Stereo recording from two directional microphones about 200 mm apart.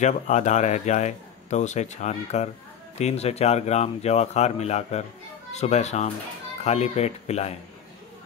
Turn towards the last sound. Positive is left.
turn(degrees=30)  # may be behind; listen again after turning